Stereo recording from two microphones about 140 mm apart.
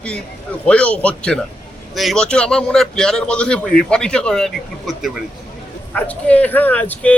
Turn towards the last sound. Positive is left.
turn(degrees=10)  # may be behind; listen again after turning